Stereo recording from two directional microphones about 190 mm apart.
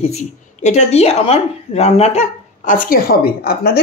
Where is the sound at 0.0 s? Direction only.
35° left (ahead or behind).